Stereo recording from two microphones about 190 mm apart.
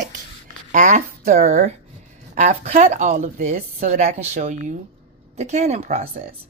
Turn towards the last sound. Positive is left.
turn(degrees=-35)  # may be behind; listen again after turning